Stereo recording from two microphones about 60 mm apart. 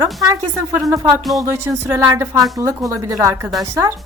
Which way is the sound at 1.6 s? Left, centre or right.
Right.